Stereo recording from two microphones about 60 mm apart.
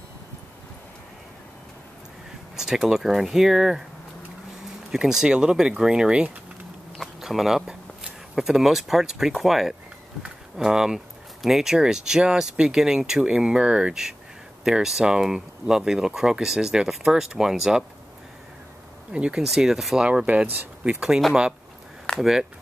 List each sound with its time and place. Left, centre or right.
2.5 s speech: centre
4.9 s speech: centre
7.0 s speech: centre
19.1 s speech: centre
19.4 s speech: centre
20.0 s speech: centre
22.2 s speech: centre